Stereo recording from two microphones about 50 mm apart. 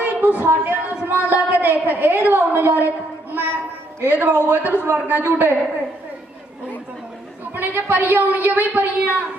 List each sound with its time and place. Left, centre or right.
0.0 s a woman's voice: right
4.0 s speech: right
7.5 s speech: right